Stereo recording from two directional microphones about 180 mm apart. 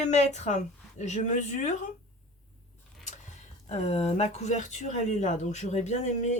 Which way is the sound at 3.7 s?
35° left (ahead or behind).